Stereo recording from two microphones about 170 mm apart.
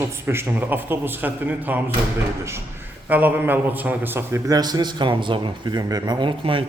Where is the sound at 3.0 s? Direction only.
10° right (ahead or behind); by 6.6 s 30° right (ahead or behind).